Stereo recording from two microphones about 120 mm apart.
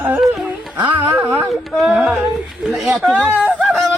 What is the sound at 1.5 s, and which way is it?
Speech, centre (ahead or behind).